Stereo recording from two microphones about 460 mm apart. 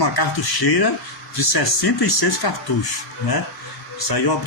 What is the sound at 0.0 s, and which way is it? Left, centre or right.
A man's voice, left.